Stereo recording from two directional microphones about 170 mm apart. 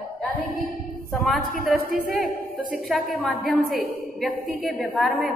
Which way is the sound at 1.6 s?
Centre (ahead or behind).